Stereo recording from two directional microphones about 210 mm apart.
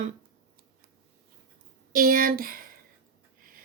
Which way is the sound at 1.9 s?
40° right (ahead or behind).